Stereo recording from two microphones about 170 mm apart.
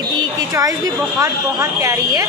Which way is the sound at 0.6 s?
20° right (ahead or behind).